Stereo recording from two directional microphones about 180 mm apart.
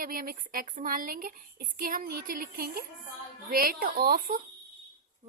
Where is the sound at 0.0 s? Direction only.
55° right (ahead or behind).